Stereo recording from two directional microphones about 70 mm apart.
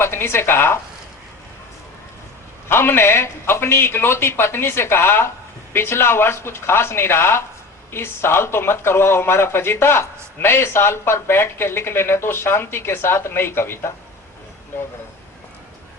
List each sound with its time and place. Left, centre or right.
0.0 s a woman's voice: left
2.6 s speech: left